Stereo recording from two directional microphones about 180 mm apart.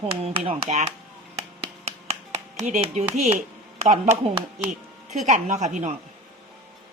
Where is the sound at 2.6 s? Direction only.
40° right (ahead or behind).